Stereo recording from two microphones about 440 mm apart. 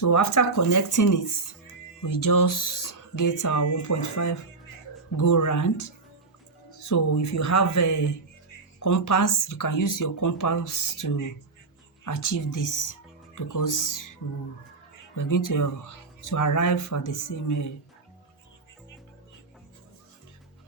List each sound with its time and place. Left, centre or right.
0.0 s speech: left
15.2 s speech: left